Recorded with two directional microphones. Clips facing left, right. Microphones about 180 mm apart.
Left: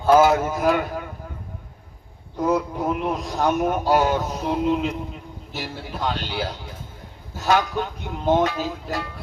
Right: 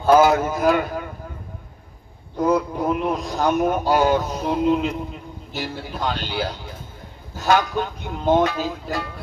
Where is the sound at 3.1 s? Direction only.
Centre (ahead or behind).